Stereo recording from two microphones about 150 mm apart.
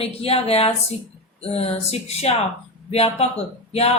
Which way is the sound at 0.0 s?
40° left (ahead or behind).